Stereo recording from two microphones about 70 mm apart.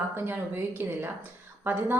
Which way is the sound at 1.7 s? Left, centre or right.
Right.